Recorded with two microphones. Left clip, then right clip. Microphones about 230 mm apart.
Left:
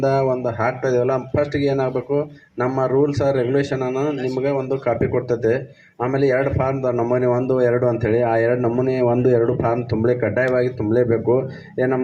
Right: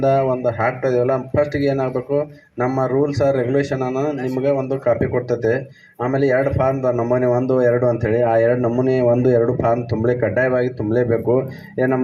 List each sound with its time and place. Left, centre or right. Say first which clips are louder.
0.0 s a man's voice: right 2 dB; right